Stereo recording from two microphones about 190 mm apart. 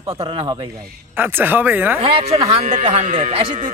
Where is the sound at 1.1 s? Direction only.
10° right (ahead or behind).